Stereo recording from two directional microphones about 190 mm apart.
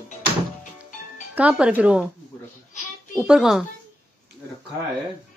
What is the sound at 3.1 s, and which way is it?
Speech, 5° right (ahead or behind).